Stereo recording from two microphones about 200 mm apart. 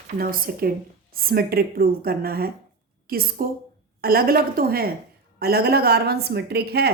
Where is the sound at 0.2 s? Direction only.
45° right (ahead or behind).